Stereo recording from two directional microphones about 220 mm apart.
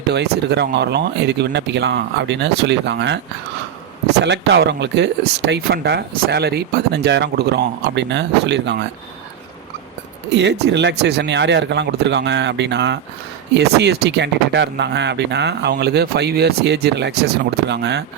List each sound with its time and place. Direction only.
0.1 s speech: 50° right (ahead or behind)
4.2 s speech: 50° right (ahead or behind)
10.3 s speech: 50° right (ahead or behind)